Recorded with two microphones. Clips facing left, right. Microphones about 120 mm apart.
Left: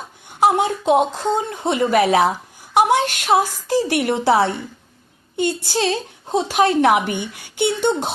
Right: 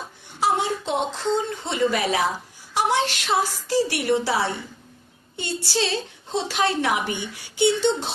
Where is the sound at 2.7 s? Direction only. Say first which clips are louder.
Left 6 dB; 50° left (ahead or behind).